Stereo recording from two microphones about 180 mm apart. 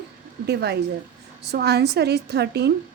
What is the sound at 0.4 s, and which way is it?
A woman's voice, 65° right (ahead or behind).